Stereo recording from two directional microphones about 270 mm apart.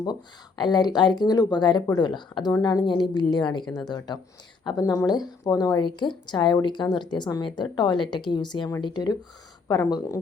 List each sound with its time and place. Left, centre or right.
0.6 s speech: centre